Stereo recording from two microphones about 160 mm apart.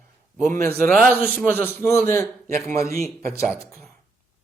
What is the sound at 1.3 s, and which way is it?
A man's voice, 10° left (ahead or behind).